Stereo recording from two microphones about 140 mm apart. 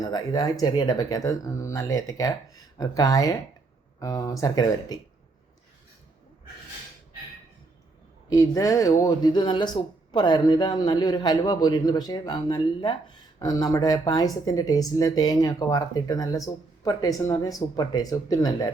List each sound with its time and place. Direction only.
0.0 s speech: 30° left (ahead or behind)
8.3 s speech: 25° left (ahead or behind)